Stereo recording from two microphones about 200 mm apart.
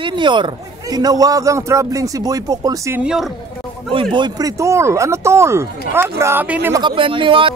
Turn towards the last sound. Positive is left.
turn(degrees=-25)  # may be behind; listen again after turning